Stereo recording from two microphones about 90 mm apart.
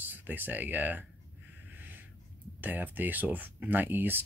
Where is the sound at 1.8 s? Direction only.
20° right (ahead or behind).